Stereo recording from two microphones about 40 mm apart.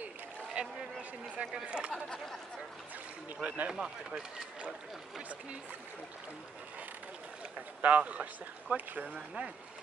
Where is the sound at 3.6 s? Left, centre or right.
Centre.